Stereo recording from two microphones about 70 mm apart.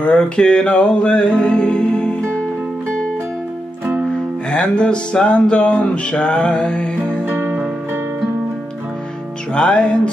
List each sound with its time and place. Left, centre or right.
0.0 s music: centre
4.5 s music: centre
7.2 s music: right
9.5 s music: centre